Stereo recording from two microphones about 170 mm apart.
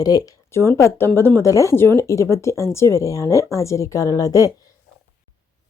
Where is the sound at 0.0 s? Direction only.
20° left (ahead or behind).